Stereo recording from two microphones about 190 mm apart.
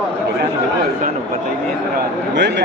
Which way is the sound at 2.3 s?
65° right (ahead or behind).